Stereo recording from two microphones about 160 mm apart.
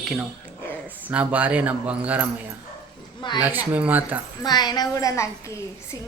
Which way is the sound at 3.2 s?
30° left (ahead or behind).